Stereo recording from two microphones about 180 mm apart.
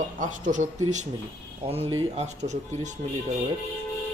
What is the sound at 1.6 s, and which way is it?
Speech, 30° right (ahead or behind).